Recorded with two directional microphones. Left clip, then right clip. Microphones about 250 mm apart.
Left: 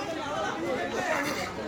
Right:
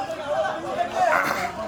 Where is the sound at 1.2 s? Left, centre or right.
Centre.